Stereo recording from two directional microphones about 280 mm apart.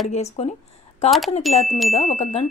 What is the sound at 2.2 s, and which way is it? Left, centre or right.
Speech, left.